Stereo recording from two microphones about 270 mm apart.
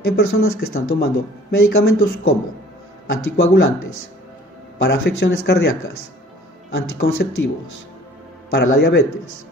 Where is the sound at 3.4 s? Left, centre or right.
Left.